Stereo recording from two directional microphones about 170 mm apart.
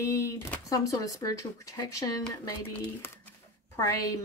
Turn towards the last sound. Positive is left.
turn(degrees=20)  # may be behind; listen again after turning